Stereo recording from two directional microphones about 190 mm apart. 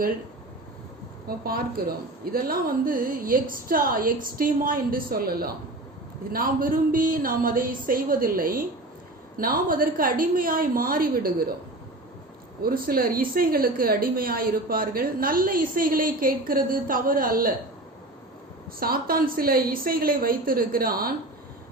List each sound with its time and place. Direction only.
1.3 s a woman's voice: 50° right (ahead or behind)
12.6 s a woman's voice: 50° right (ahead or behind)
18.8 s a woman's voice: 50° right (ahead or behind)